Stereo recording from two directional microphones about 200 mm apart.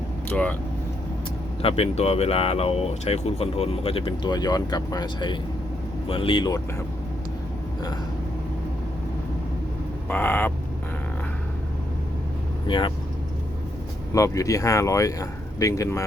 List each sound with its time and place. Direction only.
0.3 s speech: 5° left (ahead or behind)
1.6 s speech: 30° left (ahead or behind)
10.1 s speech: 10° left (ahead or behind)
12.6 s speech: 25° left (ahead or behind)
14.1 s speech: 15° left (ahead or behind)